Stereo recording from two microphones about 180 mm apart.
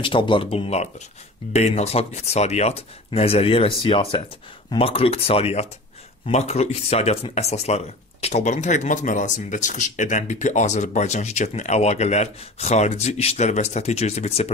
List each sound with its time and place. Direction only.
0.0 s speech: 30° left (ahead or behind)